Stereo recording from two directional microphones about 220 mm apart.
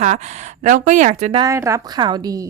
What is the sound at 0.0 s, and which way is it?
Speech, 30° right (ahead or behind).